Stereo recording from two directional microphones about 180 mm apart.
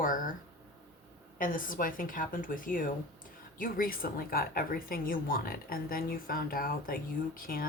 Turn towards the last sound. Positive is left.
turn(degrees=55)  # may be behind; listen again after turning